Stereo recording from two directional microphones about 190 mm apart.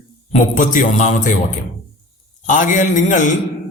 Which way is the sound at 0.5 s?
45° left (ahead or behind).